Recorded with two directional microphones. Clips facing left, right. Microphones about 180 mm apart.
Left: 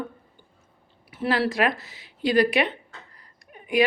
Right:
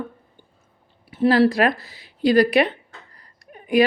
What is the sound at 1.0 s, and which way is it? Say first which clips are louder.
Speech: right 8 dB; 30° right (ahead or behind).